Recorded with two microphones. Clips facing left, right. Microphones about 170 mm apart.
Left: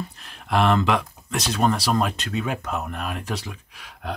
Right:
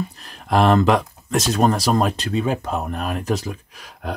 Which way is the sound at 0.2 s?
40° right (ahead or behind).